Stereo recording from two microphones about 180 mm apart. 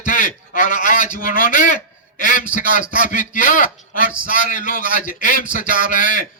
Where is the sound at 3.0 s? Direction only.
45° left (ahead or behind).